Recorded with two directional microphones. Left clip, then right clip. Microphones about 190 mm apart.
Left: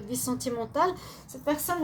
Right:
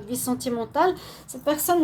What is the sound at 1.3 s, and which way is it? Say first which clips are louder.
Speech: right 6 dB; 45° right (ahead or behind).